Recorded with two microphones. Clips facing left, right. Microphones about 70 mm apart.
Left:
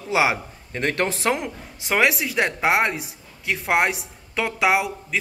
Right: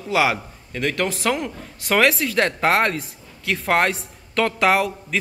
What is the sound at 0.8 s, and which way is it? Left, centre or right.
Speech, left.